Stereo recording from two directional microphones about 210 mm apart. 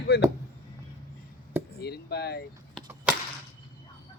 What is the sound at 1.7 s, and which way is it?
Speech, 50° left (ahead or behind).